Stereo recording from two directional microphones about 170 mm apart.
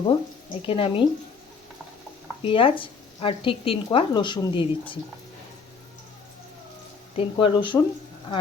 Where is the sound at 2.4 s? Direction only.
30° left (ahead or behind).